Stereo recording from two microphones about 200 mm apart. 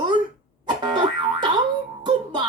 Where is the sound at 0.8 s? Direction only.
20° right (ahead or behind).